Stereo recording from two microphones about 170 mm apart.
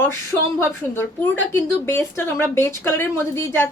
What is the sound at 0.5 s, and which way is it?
A woman's voice, 15° left (ahead or behind).